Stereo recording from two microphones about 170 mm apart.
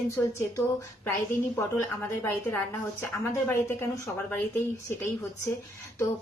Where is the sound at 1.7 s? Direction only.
15° left (ahead or behind).